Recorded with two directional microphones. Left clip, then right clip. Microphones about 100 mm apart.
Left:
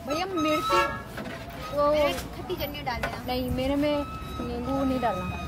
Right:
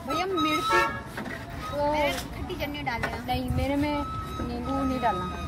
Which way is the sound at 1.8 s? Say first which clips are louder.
Left 3 dB; 40° left (ahead or behind).